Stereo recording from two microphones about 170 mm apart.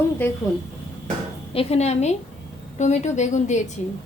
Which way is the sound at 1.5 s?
40° left (ahead or behind).